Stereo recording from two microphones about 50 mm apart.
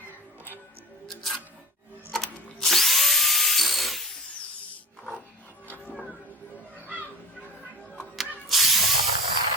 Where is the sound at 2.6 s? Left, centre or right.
Centre.